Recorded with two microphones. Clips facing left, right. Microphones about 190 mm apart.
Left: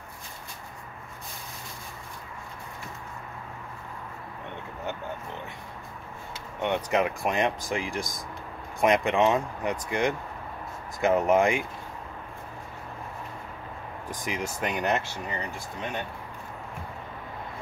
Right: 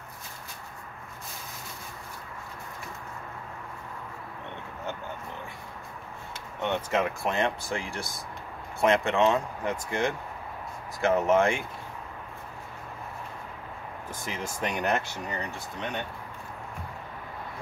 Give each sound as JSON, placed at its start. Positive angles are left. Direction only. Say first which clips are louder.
{"t": 6.6, "sound": "speech", "louder": "left 2 dB", "side_deg": 15}
{"t": 14.1, "sound": "speech", "louder": "left 4 dB", "side_deg": 15}